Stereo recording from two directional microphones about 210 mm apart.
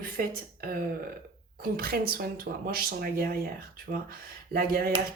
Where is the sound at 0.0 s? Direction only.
45° right (ahead or behind).